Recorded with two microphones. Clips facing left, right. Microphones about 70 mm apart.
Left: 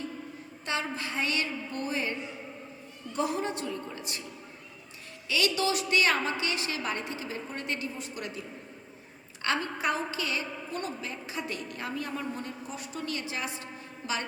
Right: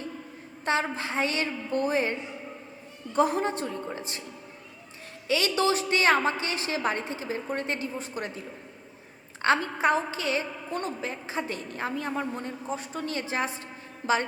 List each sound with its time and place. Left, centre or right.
0.6 s a woman's voice: right
5.3 s a woman's voice: right
9.4 s a woman's voice: right